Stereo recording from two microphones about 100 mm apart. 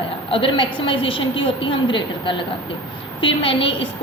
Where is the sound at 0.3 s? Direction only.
60° left (ahead or behind).